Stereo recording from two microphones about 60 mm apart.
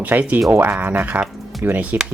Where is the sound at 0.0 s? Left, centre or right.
Right.